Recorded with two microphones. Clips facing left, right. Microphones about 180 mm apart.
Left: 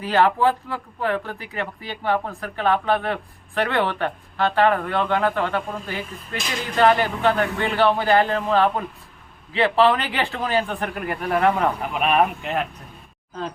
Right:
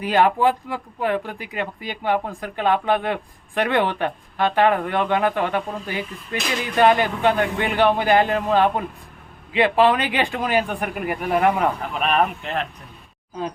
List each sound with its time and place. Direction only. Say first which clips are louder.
0.0 s speech: right 1 dB; 15° right (ahead or behind)
11.8 s speech: left 1 dB; 5° left (ahead or behind)